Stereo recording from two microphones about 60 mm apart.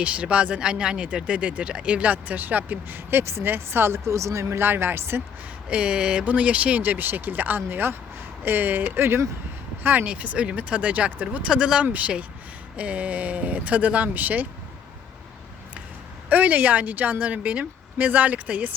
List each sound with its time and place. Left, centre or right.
0.0 s speech: right
3.1 s speech: right
5.7 s speech: centre
11.4 s speech: centre
16.3 s speech: right